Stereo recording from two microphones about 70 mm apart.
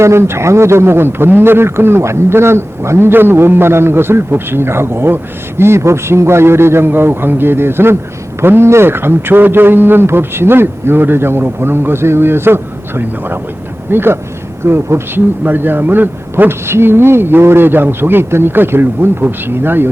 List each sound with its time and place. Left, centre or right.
0.0 s a man's voice: right